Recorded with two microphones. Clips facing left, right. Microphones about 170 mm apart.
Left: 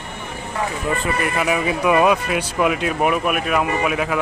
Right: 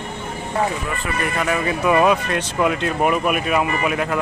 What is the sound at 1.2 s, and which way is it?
Speech, 5° left (ahead or behind).